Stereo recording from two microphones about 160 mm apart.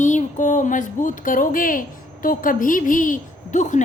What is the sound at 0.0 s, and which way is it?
Speech, 50° left (ahead or behind).